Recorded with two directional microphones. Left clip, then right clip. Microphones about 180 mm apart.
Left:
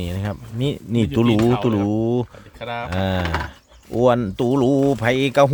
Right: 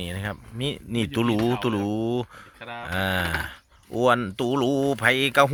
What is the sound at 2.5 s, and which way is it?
Speech, 30° left (ahead or behind).